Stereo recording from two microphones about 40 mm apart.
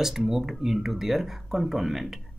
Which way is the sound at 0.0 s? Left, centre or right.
Centre.